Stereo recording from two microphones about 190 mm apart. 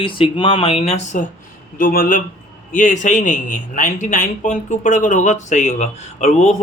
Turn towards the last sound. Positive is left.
turn(degrees=40)  # may be behind; listen again after turning